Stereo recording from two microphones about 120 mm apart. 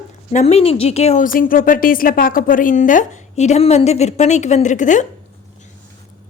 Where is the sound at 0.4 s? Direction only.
55° left (ahead or behind).